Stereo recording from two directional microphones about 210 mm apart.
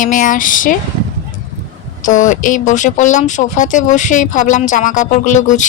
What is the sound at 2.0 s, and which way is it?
Speech, 40° left (ahead or behind).